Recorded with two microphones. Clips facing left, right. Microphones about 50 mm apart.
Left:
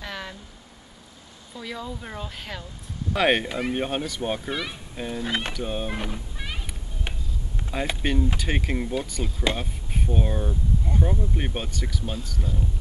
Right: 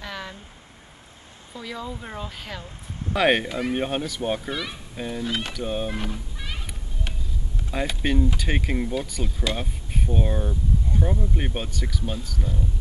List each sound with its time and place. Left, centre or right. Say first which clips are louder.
0.0 s a sound: even; centre
1.6 s speech: right 1 dB; centre
5.2 s speech: left 1 dB; left
5.5 s speech: right 1 dB; centre
7.9 s speech: right 2 dB; centre